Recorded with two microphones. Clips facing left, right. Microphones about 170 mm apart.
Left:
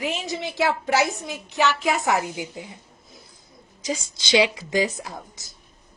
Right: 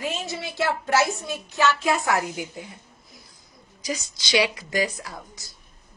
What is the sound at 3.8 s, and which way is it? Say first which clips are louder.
Speech: left 2 dB; 25° left (ahead or behind).